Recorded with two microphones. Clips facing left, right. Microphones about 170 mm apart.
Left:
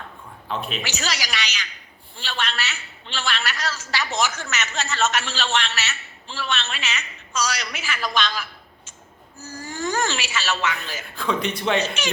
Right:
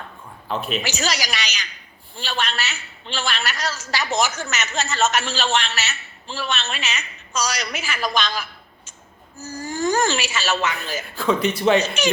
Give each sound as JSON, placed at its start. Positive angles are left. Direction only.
{"t": 0.4, "sound": "a man's voice", "side_deg": 0}
{"t": 0.8, "sound": "a man's voice", "side_deg": -45}
{"t": 11.2, "sound": "a man's voice", "side_deg": -5}
{"t": 11.8, "sound": "a man's voice", "side_deg": -45}